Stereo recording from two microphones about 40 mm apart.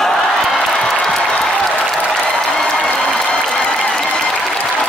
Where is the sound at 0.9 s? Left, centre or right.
Centre.